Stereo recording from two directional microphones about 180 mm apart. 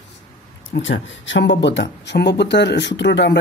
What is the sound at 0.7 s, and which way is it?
Speech, 90° left.